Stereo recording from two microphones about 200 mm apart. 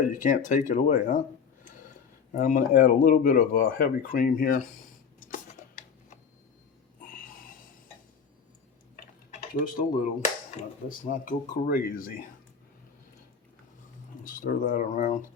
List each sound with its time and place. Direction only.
0.0 s speech: 40° left (ahead or behind)
2.3 s speech: 40° left (ahead or behind)
5.6 s a sound: 40° left (ahead or behind)
7.0 s a sound: 45° left (ahead or behind)
9.6 s speech: 40° left (ahead or behind)
14.3 s speech: 40° left (ahead or behind)